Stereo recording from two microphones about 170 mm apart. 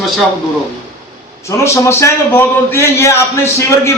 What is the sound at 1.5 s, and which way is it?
A man's voice, 15° left (ahead or behind).